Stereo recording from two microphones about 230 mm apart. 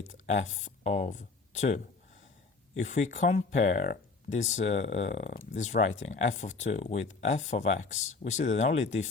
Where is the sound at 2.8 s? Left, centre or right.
Left.